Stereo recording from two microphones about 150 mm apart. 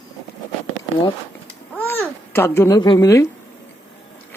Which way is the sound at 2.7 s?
25° left (ahead or behind).